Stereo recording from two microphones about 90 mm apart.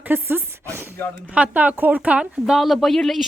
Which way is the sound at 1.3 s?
15° right (ahead or behind).